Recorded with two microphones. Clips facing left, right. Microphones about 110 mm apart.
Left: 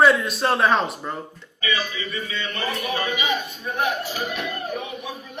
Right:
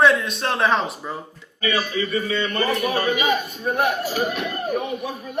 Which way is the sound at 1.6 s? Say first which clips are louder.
Right 4 dB; 45° right (ahead or behind).